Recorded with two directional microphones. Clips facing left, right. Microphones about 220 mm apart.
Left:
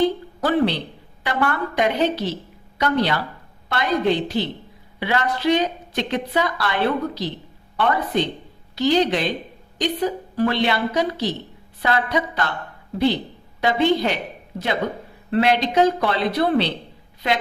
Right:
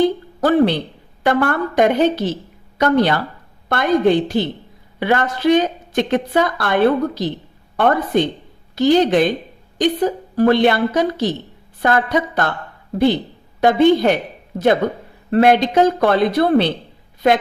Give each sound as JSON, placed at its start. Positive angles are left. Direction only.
{"t": 0.4, "sound": "a woman's voice", "side_deg": -50}
{"t": 13.6, "sound": "a woman's voice", "side_deg": -50}
{"t": 15.3, "sound": "a woman's voice", "side_deg": -50}